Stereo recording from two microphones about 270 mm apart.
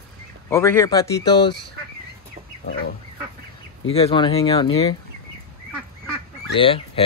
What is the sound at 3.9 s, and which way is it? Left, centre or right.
Speech, centre.